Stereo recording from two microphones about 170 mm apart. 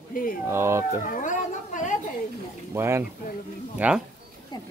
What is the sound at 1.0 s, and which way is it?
Speech, 50° left (ahead or behind).